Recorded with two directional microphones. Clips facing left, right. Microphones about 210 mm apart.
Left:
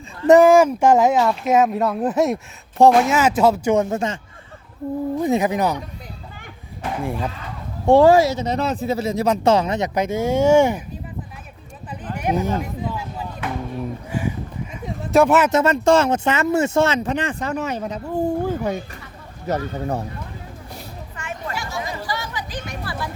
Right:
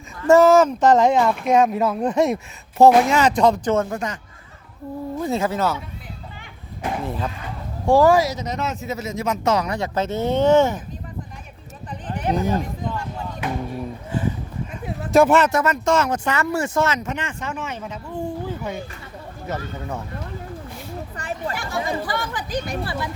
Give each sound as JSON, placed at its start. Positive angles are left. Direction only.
{"t": 0.2, "sound": "speech", "side_deg": 15}
{"t": 7.0, "sound": "speech", "side_deg": 10}
{"t": 7.9, "sound": "speech", "side_deg": 25}
{"t": 12.1, "sound": "chatter", "side_deg": 10}
{"t": 12.5, "sound": "a sound", "side_deg": 5}
{"t": 14.1, "sound": "speech", "side_deg": 10}
{"t": 14.8, "sound": "speech", "side_deg": 0}
{"t": 15.5, "sound": "speech", "side_deg": 30}
{"t": 21.2, "sound": "a sound", "side_deg": -35}
{"t": 21.5, "sound": "chatter", "side_deg": -55}
{"t": 22.6, "sound": "speech", "side_deg": -35}